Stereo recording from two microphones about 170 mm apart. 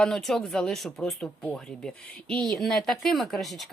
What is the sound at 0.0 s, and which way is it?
A woman's voice, centre (ahead or behind).